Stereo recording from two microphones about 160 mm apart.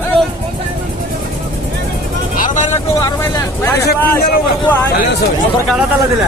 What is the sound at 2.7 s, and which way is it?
Speech, 15° left (ahead or behind).